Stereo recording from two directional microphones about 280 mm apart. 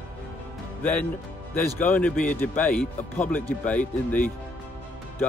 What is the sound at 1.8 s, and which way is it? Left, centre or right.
Speech, centre.